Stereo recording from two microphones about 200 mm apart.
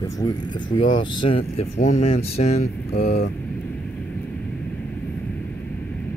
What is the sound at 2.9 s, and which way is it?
Speech, 55° left (ahead or behind).